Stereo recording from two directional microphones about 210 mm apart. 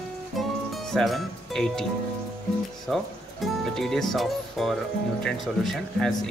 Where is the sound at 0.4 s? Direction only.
Centre (ahead or behind).